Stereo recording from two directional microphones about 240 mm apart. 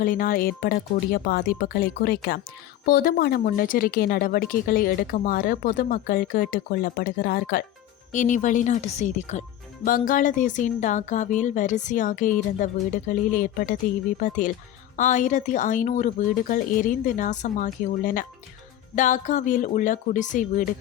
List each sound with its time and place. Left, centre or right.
0.0 s speech: left